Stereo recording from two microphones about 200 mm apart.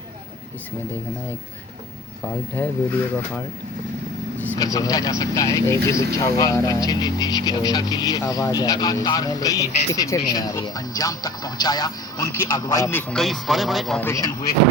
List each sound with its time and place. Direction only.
2.6 s speech: 10° left (ahead or behind)
4.5 s speech: 15° left (ahead or behind); by 14.1 s centre (ahead or behind)
14.1 s speech: 20° left (ahead or behind)